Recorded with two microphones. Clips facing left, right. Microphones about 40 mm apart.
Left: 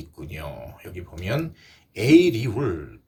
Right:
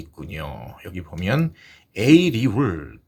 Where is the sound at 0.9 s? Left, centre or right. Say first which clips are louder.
Right 5 dB; right.